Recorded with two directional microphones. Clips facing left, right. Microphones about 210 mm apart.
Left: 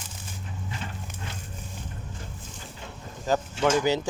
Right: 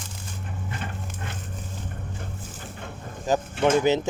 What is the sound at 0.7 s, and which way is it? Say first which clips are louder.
Dog: right 3 dB; 55° right (ahead or behind).